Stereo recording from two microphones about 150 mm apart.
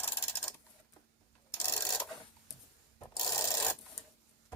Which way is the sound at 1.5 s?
10° left (ahead or behind).